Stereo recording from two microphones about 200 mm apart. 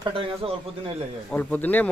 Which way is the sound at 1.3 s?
10° left (ahead or behind).